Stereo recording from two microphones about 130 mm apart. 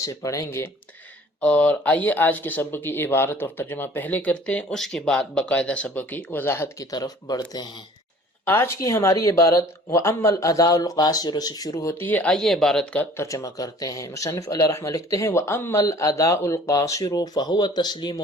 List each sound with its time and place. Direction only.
0.0 s speech: 25° left (ahead or behind)
1.4 s speech: 10° left (ahead or behind)
6.9 s speech: 30° left (ahead or behind)
8.4 s speech: 20° left (ahead or behind)
13.1 s speech: 25° left (ahead or behind)